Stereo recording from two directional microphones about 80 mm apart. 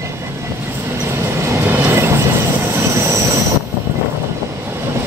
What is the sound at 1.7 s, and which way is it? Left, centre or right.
Train, right.